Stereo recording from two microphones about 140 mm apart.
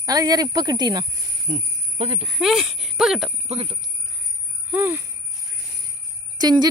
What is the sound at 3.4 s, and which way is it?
Speech, 50° right (ahead or behind).